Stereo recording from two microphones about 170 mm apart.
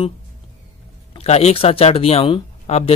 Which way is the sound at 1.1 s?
40° left (ahead or behind).